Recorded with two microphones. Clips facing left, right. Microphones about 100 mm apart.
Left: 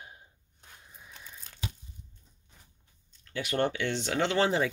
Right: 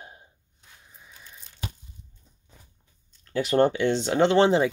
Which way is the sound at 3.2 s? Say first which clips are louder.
Right 8 dB; 35° right (ahead or behind).